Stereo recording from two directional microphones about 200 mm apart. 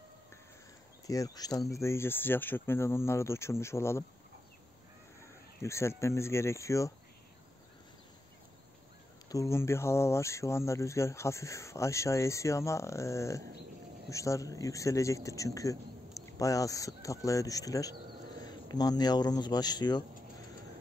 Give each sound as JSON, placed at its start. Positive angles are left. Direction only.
{"t": 1.0, "sound": "speech", "side_deg": 15}
{"t": 5.6, "sound": "speech", "side_deg": 15}
{"t": 9.3, "sound": "speech", "side_deg": 15}